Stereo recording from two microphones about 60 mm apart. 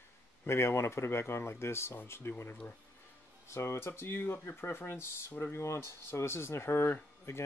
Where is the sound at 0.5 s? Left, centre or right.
Left.